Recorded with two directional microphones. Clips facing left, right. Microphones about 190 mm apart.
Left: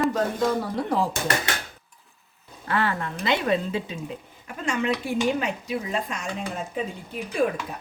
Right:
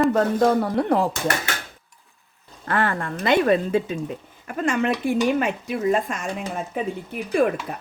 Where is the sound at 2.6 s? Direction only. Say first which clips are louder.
Right 2 dB; 50° right (ahead or behind).